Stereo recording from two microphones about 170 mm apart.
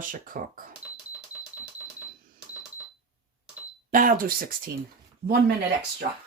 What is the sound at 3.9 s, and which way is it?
Speech, 55° right (ahead or behind).